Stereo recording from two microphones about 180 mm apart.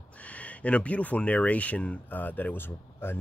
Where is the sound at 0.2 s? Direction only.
5° left (ahead or behind).